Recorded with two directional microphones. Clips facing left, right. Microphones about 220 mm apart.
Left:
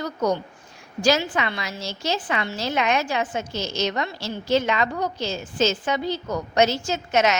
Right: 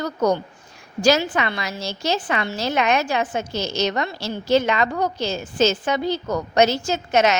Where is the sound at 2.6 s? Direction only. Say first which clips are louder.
Right 3 dB; 70° right (ahead or behind).